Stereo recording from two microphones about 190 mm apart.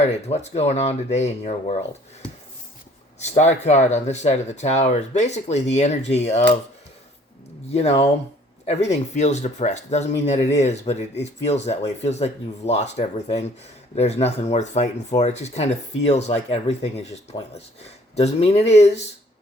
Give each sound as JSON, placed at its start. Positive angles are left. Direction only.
{"t": 0.0, "sound": "speech", "side_deg": 35}
{"t": 3.2, "sound": "speech", "side_deg": 35}
{"t": 7.7, "sound": "speech", "side_deg": 35}
{"t": 18.2, "sound": "speech", "side_deg": 35}